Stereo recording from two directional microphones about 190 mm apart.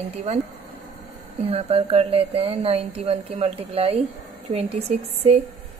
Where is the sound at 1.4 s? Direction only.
30° right (ahead or behind).